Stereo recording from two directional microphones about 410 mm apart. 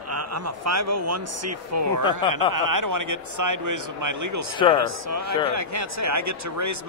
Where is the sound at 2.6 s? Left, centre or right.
Right.